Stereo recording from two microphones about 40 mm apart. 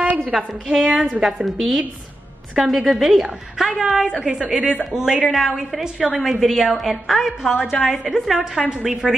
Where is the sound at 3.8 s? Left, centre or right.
Centre.